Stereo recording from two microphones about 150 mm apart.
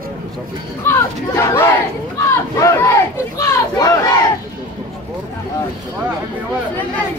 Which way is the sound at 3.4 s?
20° left (ahead or behind).